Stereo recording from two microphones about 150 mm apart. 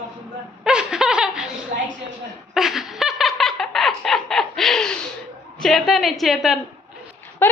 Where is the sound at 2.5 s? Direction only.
Centre (ahead or behind).